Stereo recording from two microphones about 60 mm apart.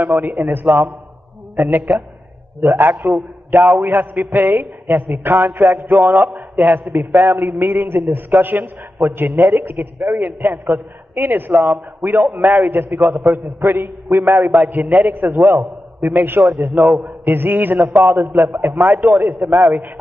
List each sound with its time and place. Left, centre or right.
0.0 s a man's voice: right
16.5 s a man's voice: right
17.2 s a man's voice: right